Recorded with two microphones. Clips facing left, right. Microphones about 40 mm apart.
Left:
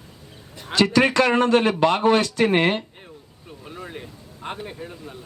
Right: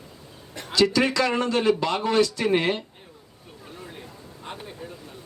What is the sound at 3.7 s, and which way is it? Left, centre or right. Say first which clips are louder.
Vehicle: left 5 dB; left.